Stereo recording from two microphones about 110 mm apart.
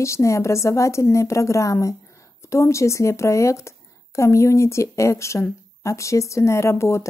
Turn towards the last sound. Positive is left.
turn(degrees=25)  # may be behind; listen again after turning